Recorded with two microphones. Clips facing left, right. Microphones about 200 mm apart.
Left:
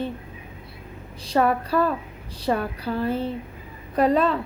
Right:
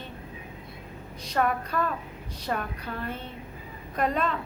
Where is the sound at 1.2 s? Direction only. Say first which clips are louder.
Left 6 dB; 30° left (ahead or behind).